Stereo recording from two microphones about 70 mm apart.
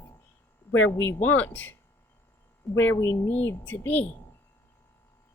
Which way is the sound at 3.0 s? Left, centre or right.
Left.